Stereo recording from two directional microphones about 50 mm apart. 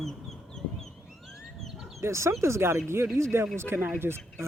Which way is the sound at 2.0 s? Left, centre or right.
Right.